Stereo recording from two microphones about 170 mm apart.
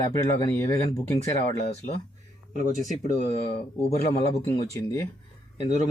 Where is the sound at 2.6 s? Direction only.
50° left (ahead or behind).